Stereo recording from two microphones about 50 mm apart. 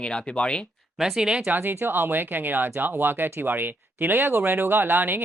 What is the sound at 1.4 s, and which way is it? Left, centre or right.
Speech, right.